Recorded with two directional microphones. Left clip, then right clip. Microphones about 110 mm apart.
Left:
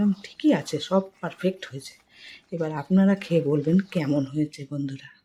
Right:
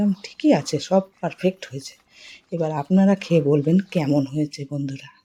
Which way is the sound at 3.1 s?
35° right (ahead or behind).